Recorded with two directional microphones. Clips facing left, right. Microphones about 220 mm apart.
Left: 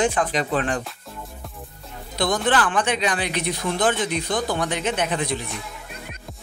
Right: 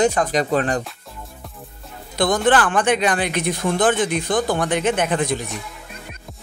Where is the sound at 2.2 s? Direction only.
50° right (ahead or behind).